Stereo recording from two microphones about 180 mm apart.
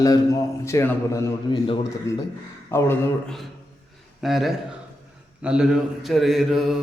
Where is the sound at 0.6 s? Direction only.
15° left (ahead or behind).